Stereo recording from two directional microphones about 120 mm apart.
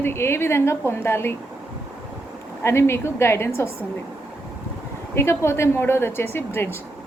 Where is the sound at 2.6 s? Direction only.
20° left (ahead or behind).